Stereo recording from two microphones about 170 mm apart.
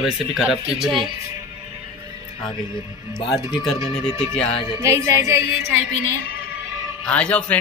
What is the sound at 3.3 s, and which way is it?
Speech, centre (ahead or behind).